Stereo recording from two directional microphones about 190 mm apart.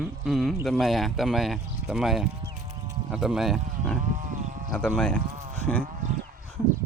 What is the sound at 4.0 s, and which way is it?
Wild animals, 40° right (ahead or behind).